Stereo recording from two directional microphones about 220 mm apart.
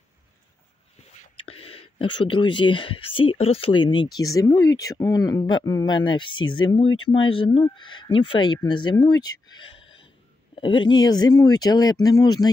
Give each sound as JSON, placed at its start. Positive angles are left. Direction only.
{"t": 1.3, "sound": "speech", "side_deg": 25}